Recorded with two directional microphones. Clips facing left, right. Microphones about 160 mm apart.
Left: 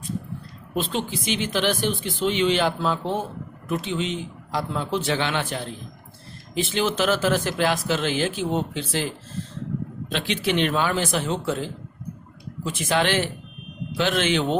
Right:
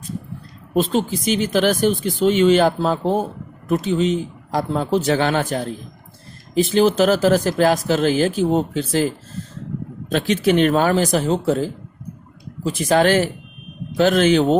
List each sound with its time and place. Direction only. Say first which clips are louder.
0.7 s speech: right 8 dB; 40° right (ahead or behind)